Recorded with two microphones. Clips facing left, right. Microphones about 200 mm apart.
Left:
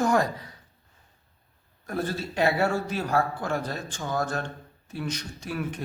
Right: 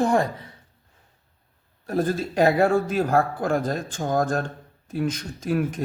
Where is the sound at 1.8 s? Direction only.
40° right (ahead or behind).